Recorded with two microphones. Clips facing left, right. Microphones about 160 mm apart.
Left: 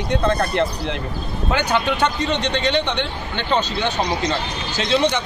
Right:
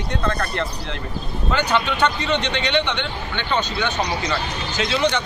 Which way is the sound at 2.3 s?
35° left (ahead or behind).